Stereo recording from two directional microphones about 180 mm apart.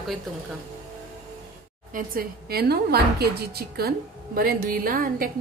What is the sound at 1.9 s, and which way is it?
A woman's voice, 55° right (ahead or behind).